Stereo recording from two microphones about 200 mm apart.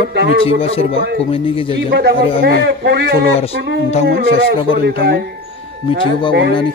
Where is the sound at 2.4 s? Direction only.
55° right (ahead or behind).